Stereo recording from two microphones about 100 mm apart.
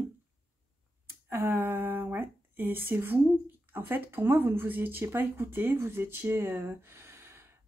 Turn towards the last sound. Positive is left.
turn(degrees=-25)  # may be behind; listen again after turning